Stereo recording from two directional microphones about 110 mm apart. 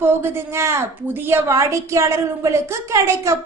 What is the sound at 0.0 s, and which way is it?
A woman's voice, 20° right (ahead or behind).